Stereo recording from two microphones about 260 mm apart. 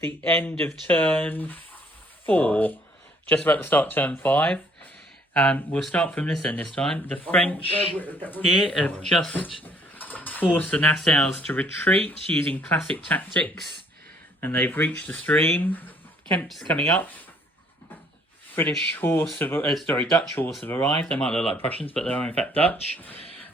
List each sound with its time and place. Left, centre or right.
0.2 s speech: centre
18.5 s speech: centre
23.1 s a sound: left